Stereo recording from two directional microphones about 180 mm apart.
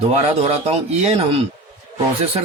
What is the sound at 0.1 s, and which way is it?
A man's voice, 35° right (ahead or behind).